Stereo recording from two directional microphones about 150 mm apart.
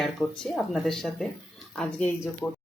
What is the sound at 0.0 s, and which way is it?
Speech, centre (ahead or behind).